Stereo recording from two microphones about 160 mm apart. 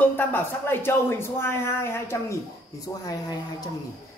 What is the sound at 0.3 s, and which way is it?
Speech, 15° left (ahead or behind).